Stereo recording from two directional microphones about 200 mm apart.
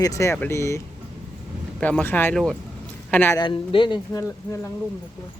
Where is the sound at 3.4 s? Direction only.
25° left (ahead or behind).